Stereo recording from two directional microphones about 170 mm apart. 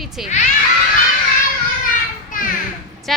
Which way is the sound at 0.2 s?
Centre (ahead or behind).